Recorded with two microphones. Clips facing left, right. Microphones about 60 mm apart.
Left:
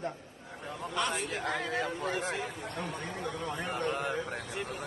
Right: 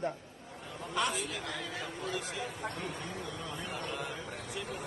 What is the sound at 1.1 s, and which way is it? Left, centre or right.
A woman's voice, left.